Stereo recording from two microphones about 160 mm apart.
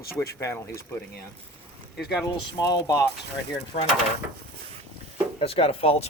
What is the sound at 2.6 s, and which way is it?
Speech, 20° left (ahead or behind).